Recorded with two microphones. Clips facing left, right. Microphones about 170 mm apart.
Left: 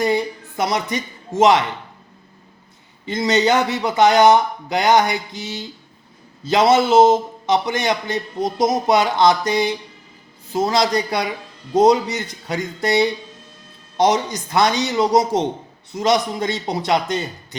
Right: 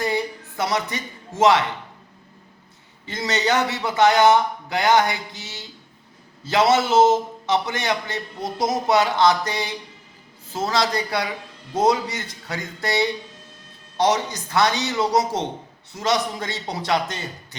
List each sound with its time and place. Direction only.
0.0 s a man's voice: 20° left (ahead or behind)
3.1 s a man's voice: 15° left (ahead or behind)